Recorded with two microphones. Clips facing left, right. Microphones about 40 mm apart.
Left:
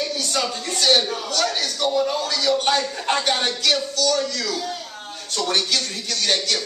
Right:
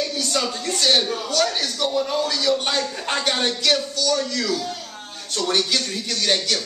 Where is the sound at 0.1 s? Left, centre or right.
Centre.